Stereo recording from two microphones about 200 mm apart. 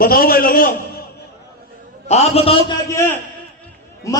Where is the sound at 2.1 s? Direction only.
30° left (ahead or behind).